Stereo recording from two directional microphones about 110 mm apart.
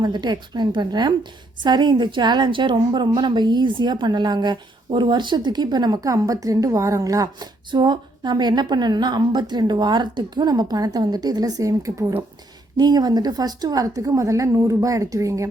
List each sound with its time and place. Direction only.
0.0 s a woman's voice: 40° right (ahead or behind)
7.7 s a woman's voice: 45° right (ahead or behind); by 12.2 s 30° right (ahead or behind)
12.7 s a woman's voice: 40° right (ahead or behind)